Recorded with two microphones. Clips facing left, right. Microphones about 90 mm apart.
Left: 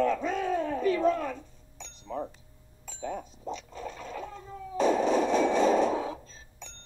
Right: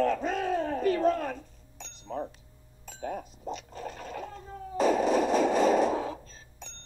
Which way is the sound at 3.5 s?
40° right (ahead or behind).